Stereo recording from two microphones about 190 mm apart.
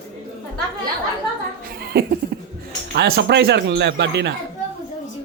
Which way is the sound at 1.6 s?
50° right (ahead or behind).